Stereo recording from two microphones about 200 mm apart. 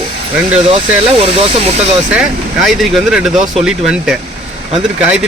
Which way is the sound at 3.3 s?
35° right (ahead or behind).